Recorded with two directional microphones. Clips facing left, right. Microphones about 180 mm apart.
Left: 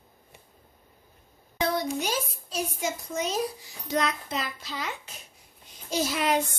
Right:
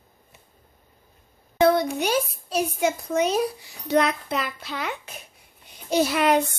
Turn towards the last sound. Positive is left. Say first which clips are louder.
# right 6 dB
turn(degrees=-60)  # may be behind; listen again after turning